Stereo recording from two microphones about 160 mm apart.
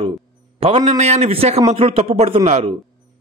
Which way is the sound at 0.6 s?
40° right (ahead or behind).